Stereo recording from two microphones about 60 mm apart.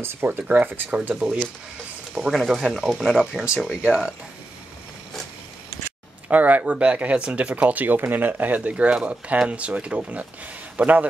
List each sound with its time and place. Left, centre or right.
0.0 s speech: right
1.1 s speech: centre
6.2 s speech: right